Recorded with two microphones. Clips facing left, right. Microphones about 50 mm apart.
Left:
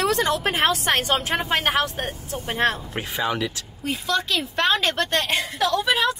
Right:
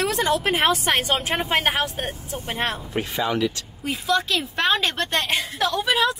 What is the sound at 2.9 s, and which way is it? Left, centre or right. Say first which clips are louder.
Speech: right 1 dB; left.